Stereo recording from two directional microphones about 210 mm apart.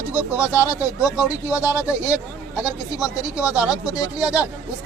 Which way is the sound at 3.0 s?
5° right (ahead or behind).